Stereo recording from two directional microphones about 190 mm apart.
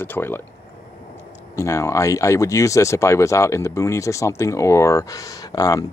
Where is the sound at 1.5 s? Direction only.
15° left (ahead or behind).